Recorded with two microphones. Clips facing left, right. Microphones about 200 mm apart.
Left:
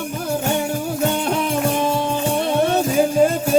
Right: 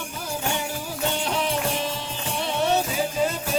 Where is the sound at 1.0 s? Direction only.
50° left (ahead or behind).